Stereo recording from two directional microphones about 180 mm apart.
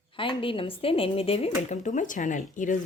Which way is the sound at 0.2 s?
30° left (ahead or behind).